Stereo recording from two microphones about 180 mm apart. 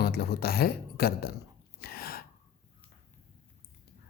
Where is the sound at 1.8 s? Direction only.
55° left (ahead or behind).